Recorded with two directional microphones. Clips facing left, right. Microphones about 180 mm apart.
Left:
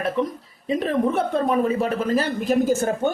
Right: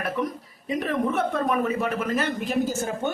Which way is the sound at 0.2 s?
30° left (ahead or behind).